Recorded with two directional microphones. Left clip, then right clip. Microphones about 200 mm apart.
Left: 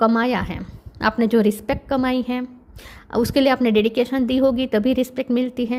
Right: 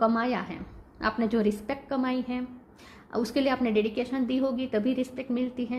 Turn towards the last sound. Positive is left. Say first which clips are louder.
# left 9 dB
turn(degrees=50)  # may be behind; listen again after turning